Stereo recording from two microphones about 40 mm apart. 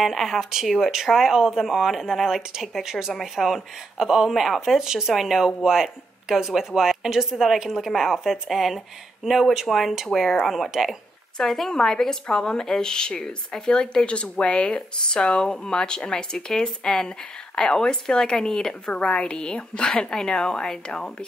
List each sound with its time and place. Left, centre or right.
0.0 s speech: centre
3.2 s speech: centre
11.3 s a woman's voice: centre